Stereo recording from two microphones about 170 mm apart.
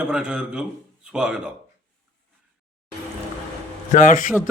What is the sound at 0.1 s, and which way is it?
A man's voice, 5° right (ahead or behind).